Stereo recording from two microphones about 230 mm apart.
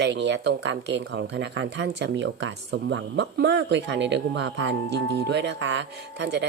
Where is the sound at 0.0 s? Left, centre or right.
Right.